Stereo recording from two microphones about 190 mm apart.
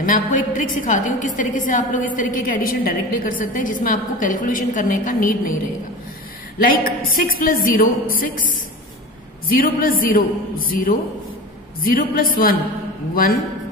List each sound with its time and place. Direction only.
0.0 s a woman's voice: 45° left (ahead or behind)
6.6 s a woman's voice: 50° left (ahead or behind)
9.5 s a woman's voice: 50° left (ahead or behind)